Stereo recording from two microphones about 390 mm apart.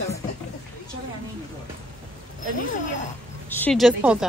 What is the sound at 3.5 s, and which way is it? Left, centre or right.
Speech, centre.